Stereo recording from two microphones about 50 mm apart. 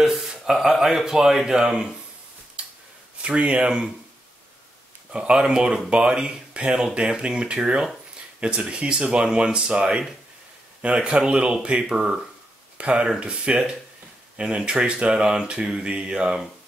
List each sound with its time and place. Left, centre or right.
0.3 s speech: centre
3.2 s speech: right
5.1 s speech: centre